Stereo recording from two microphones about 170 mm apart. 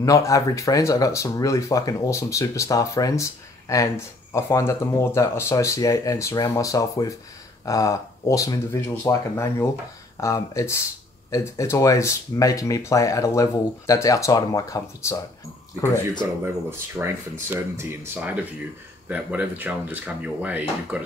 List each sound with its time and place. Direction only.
0.0 s speech: 20° left (ahead or behind)
16.4 s speech: 15° right (ahead or behind)